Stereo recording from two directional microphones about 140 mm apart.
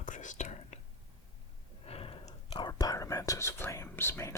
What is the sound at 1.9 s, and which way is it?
Whispering, 45° left (ahead or behind).